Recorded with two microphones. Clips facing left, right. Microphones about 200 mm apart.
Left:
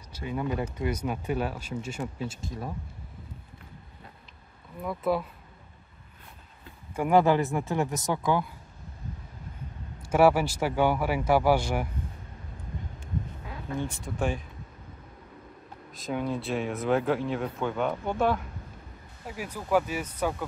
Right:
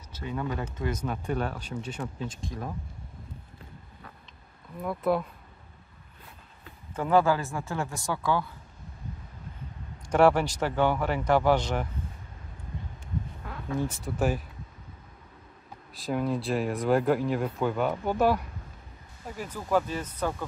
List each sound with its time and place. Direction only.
0.1 s speech: 10° left (ahead or behind)
4.8 s speech: centre (ahead or behind)
7.0 s speech: 15° left (ahead or behind)
10.0 s speech: 5° left (ahead or behind)
13.5 s a sound: 5° left (ahead or behind)
14.1 s speech: 5° right (ahead or behind)
16.0 s speech: centre (ahead or behind)
19.2 s speech: 10° left (ahead or behind)